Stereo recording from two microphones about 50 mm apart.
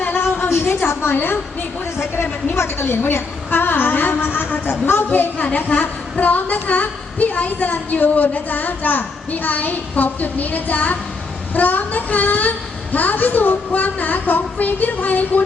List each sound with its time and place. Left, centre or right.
0.0 s a sound: left
0.9 s a woman's voice: left
2.6 s a woman's voice: left
5.4 s a woman's voice: left